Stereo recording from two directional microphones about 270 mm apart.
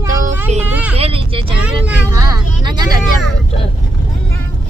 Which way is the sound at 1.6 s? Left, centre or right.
Centre.